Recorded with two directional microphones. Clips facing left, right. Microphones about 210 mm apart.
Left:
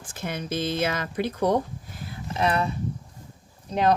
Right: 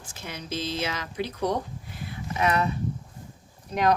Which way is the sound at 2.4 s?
30° left (ahead or behind).